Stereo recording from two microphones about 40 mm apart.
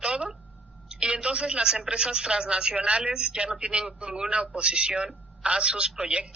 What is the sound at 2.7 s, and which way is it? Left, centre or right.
Speech, right.